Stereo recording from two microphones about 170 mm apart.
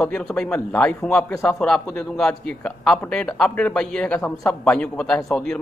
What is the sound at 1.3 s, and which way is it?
Speech, 15° left (ahead or behind).